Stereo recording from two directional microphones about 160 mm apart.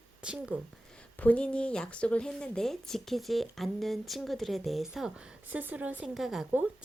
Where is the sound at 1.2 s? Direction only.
10° left (ahead or behind).